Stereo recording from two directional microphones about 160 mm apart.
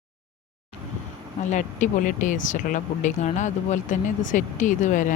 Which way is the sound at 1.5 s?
50° left (ahead or behind).